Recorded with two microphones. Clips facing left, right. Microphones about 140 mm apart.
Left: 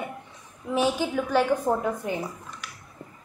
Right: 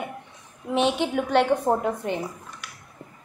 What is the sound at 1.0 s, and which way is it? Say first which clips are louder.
Speech: right 2 dB; 70° right (ahead or behind).